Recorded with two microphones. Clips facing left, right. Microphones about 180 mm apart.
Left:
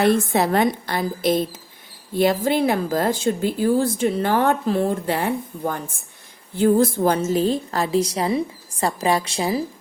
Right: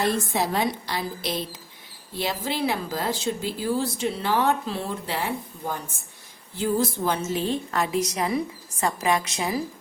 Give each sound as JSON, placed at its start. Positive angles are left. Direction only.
{"t": 0.0, "sound": "a woman's voice", "side_deg": 60}